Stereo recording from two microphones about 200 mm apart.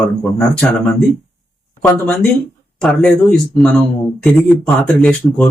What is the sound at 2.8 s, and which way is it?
Speech, centre (ahead or behind).